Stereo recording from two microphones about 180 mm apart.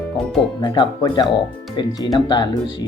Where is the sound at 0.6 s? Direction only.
25° left (ahead or behind).